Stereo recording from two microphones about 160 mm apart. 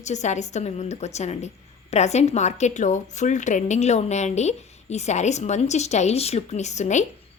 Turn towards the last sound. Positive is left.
turn(degrees=45)  # may be behind; listen again after turning